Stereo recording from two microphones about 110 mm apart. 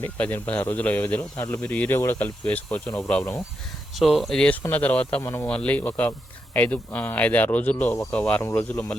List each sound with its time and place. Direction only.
0.0 s speech: 15° left (ahead or behind)
1.4 s speech: 25° left (ahead or behind)
1.6 s speech: 15° left (ahead or behind)
3.9 s speech: centre (ahead or behind)
8.4 s speech: 25° left (ahead or behind)
8.7 s speech: 15° left (ahead or behind)